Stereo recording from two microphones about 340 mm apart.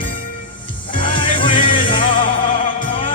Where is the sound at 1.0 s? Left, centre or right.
Centre.